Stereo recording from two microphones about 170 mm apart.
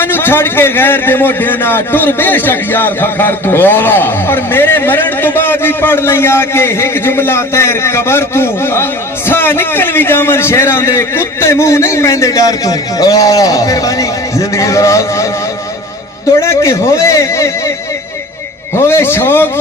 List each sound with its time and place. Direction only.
0.0 s a man's voice: 10° left (ahead or behind)
16.4 s a man's voice: 15° left (ahead or behind)
18.9 s a man's voice: 15° left (ahead or behind)